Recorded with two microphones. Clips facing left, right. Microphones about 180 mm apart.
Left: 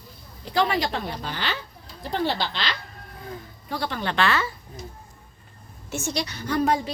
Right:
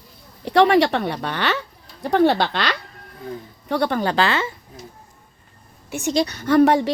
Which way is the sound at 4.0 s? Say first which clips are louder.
Right 4 dB; 35° right (ahead or behind).